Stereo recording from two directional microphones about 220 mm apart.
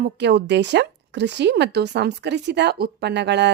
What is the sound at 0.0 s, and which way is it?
A woman's voice, 50° right (ahead or behind).